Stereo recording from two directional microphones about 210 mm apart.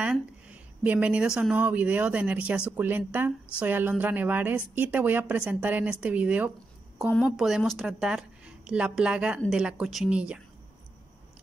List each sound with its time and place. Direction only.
0.0 s speech: 5° right (ahead or behind)